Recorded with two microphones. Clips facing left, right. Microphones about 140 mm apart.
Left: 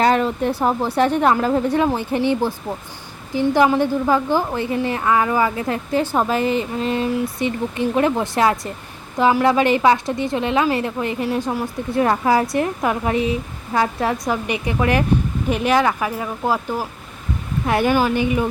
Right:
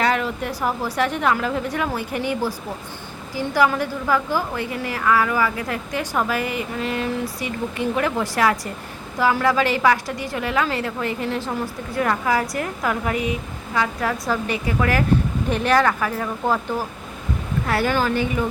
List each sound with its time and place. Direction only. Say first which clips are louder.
0.0 s a woman's voice: left 5 dB; 30° left (ahead or behind)
14.3 s a woman's voice: left 1 dB; 15° left (ahead or behind)